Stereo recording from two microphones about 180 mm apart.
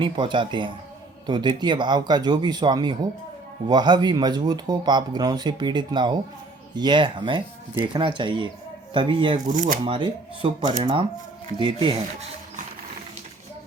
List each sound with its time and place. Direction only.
0.0 s speech: 25° right (ahead or behind)
9.5 s speech: 45° right (ahead or behind)
9.8 s speech: 30° right (ahead or behind)